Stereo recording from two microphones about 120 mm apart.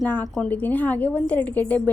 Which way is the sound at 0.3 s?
10° left (ahead or behind).